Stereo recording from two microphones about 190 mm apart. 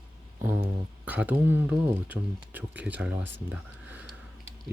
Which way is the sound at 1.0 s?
10° right (ahead or behind).